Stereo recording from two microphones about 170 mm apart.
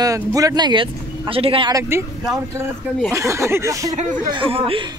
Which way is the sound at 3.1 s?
15° right (ahead or behind).